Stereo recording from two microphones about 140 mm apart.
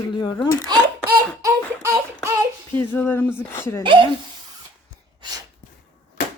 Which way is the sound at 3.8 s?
35° right (ahead or behind).